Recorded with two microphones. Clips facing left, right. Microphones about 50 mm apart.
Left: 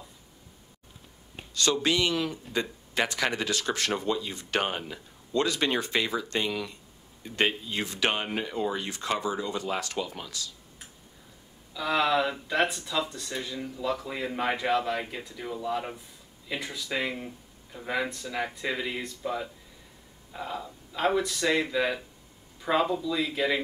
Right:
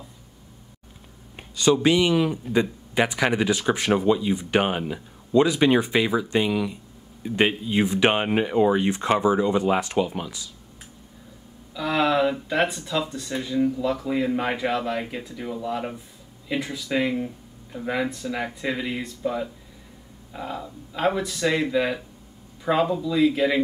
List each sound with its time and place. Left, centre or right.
1.5 s speech: centre
11.7 s speech: centre